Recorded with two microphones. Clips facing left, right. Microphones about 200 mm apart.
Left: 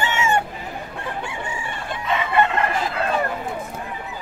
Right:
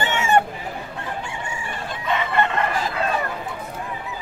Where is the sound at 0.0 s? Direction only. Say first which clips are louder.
Left 1 dB; 55° right (ahead or behind).